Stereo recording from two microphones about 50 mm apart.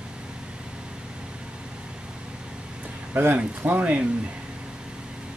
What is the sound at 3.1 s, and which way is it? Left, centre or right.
Speech, right.